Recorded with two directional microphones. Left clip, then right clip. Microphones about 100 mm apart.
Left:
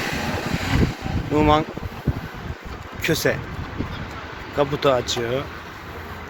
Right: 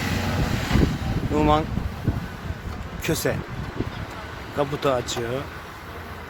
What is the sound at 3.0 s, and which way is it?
Speech, 15° right (ahead or behind).